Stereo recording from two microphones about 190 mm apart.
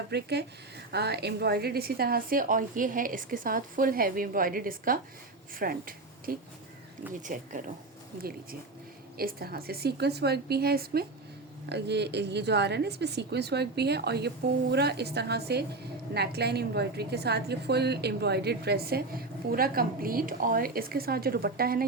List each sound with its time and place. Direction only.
0.1 s a woman's voice: 60° right (ahead or behind); by 7.6 s 40° right (ahead or behind)
9.1 s a woman's voice: 50° right (ahead or behind)